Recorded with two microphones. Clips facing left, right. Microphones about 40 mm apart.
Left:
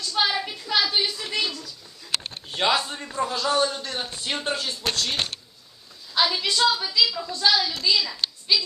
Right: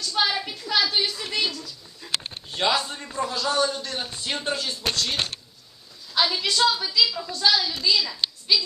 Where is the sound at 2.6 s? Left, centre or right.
Centre.